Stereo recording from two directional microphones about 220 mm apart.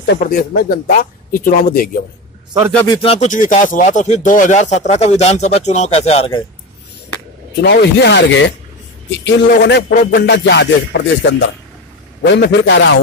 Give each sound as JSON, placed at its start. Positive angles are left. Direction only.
{"t": 0.0, "sound": "speech", "side_deg": 45}
{"t": 2.7, "sound": "speech", "side_deg": 10}
{"t": 3.0, "sound": "speech", "side_deg": 30}
{"t": 7.6, "sound": "music", "side_deg": 50}
{"t": 9.1, "sound": "a man's voice", "side_deg": 55}
{"t": 9.6, "sound": "music", "side_deg": 50}